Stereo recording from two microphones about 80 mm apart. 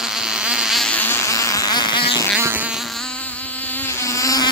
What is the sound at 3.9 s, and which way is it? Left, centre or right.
Mosquito, left.